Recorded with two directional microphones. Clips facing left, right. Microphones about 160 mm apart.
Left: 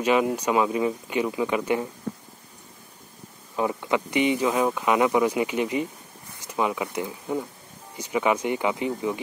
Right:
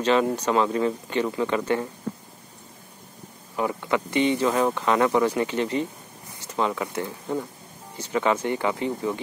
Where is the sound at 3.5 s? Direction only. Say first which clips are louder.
Even; 20° left (ahead or behind).